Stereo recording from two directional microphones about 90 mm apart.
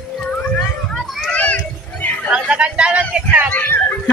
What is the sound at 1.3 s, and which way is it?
Children playing, 15° left (ahead or behind).